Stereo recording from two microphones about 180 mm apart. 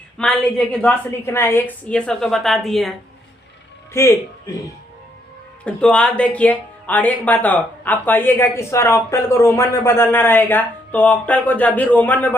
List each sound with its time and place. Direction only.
0.2 s a woman's voice: 5° left (ahead or behind)
3.9 s speech: 15° left (ahead or behind)
5.6 s speech: 5° left (ahead or behind)